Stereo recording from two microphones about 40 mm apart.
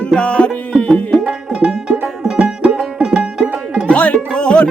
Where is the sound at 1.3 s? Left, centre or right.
Right.